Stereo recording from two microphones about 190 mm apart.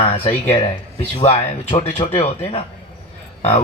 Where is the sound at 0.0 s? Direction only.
30° left (ahead or behind).